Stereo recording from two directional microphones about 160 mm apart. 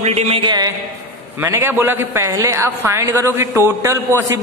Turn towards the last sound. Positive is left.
turn(degrees=-20)  # may be behind; listen again after turning